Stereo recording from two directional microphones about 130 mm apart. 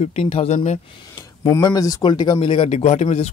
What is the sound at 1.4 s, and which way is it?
Speech, 30° left (ahead or behind).